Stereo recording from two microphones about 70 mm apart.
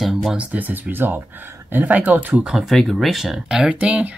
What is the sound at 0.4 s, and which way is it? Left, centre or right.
Speech, right.